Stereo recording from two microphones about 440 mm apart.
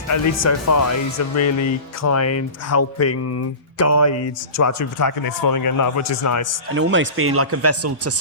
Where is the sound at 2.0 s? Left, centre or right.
Left.